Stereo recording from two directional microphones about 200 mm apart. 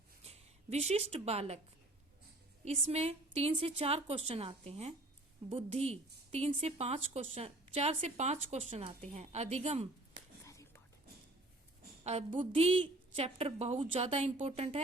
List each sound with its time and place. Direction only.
0.3 s speech: 30° right (ahead or behind)
2.6 s speech: 35° right (ahead or behind)
10.4 s whispering: 15° left (ahead or behind)
12.0 s a sound: 30° right (ahead or behind)
12.5 s speech: 30° right (ahead or behind)